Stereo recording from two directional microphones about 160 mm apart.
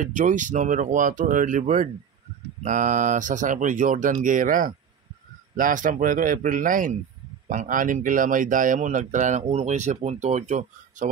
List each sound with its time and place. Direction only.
0.0 s speech: 55° right (ahead or behind)